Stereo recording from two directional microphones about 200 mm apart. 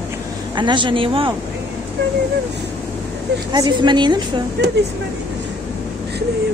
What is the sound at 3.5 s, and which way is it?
Speech, 20° right (ahead or behind).